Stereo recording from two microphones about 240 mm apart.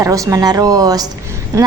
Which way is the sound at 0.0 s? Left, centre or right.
Centre.